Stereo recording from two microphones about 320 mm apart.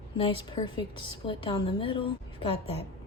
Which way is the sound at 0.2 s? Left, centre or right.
Centre.